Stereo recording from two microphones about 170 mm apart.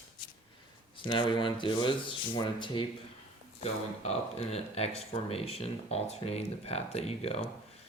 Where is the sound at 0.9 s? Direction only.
30° left (ahead or behind).